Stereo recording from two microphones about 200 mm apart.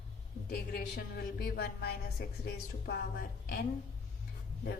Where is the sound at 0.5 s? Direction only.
50° left (ahead or behind).